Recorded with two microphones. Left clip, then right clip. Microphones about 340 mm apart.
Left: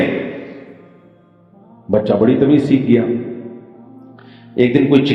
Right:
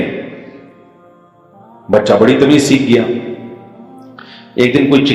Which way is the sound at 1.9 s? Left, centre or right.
Right.